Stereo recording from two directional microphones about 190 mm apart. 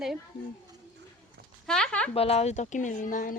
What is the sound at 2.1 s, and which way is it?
Speech, 30° left (ahead or behind).